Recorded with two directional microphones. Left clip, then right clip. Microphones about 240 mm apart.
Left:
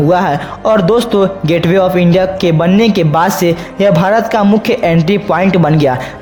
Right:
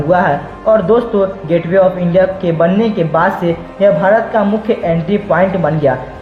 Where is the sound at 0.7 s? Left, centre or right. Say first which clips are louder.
Even; left.